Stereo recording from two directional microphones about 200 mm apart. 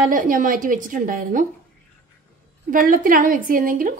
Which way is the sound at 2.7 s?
45° right (ahead or behind).